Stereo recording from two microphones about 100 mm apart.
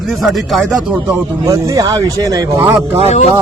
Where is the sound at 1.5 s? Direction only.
35° right (ahead or behind).